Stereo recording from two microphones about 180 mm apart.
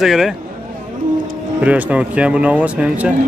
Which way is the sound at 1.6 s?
5° right (ahead or behind).